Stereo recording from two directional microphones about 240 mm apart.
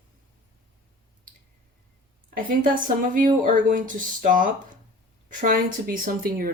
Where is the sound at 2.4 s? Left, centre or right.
Right.